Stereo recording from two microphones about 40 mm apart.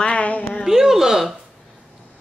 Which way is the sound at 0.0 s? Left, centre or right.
Left.